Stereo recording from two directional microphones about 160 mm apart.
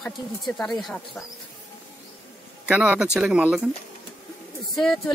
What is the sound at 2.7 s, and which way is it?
Speech, 5° right (ahead or behind).